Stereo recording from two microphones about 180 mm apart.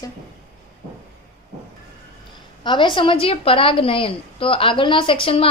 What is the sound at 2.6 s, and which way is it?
A woman's voice, 25° left (ahead or behind).